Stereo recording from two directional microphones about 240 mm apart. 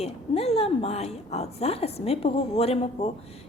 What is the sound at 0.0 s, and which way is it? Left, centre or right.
A woman's voice, left.